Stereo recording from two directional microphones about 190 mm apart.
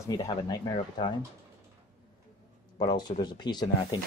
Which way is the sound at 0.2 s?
20° left (ahead or behind).